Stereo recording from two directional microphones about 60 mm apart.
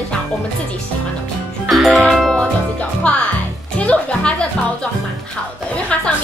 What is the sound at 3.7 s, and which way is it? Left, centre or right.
Music, centre.